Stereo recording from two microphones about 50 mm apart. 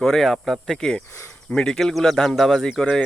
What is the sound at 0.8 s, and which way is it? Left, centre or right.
Speech, centre.